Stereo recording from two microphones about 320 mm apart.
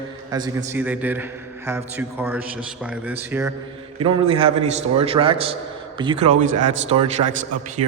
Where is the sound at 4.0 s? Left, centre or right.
Centre.